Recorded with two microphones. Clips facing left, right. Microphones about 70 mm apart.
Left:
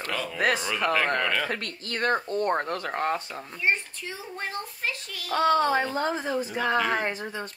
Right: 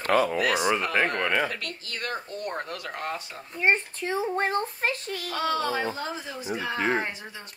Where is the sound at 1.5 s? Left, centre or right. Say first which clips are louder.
Left 3 dB; left.